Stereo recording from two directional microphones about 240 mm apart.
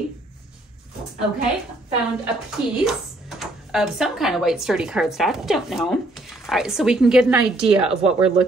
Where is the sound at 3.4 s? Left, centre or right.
Centre.